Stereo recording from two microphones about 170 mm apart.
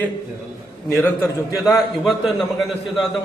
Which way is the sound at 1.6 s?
Centre (ahead or behind).